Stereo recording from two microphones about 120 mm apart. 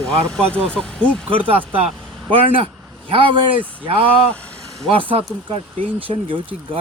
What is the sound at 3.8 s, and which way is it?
Speech, 50° right (ahead or behind).